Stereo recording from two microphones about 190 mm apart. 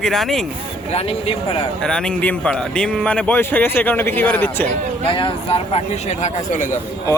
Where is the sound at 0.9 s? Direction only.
30° left (ahead or behind).